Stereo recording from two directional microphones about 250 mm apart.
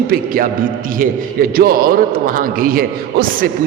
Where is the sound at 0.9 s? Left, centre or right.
Right.